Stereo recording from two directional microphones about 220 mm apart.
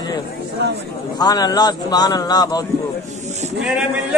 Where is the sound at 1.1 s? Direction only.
20° left (ahead or behind).